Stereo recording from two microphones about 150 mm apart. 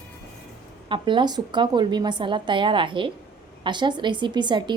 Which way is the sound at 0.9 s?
35° right (ahead or behind).